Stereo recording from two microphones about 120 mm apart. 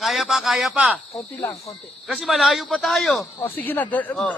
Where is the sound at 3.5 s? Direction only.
15° left (ahead or behind).